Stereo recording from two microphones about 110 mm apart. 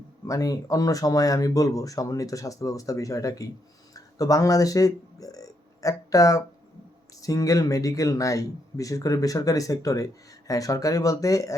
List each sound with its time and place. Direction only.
0.3 s speech: 35° left (ahead or behind)